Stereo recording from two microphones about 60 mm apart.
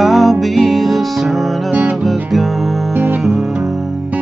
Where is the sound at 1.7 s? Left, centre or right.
Right.